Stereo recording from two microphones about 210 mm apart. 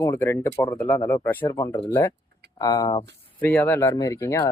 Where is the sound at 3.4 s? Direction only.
10° left (ahead or behind).